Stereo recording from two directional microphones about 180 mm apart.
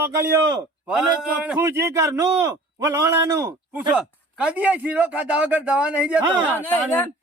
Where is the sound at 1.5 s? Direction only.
15° right (ahead or behind).